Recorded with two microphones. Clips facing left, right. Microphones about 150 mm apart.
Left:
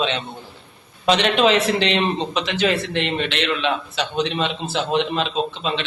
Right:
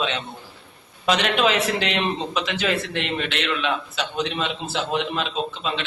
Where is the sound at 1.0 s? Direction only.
30° left (ahead or behind).